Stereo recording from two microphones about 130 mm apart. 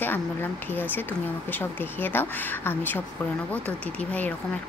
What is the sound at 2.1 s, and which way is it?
Speech, 15° left (ahead or behind).